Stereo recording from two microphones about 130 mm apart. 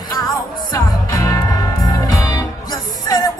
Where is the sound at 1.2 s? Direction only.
25° left (ahead or behind).